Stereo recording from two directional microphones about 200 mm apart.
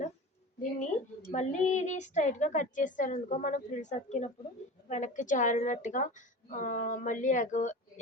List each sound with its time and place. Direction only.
0.8 s speech: 35° left (ahead or behind)